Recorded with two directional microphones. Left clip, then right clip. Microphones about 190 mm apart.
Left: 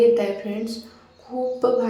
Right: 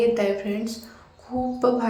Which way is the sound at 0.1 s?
5° right (ahead or behind).